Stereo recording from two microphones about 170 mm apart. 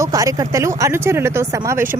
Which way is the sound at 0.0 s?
20° right (ahead or behind).